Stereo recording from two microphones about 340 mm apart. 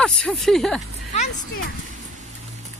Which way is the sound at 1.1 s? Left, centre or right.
Centre.